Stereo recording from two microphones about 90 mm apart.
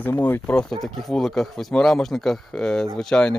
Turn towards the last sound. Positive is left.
turn(degrees=10)  # may be behind; listen again after turning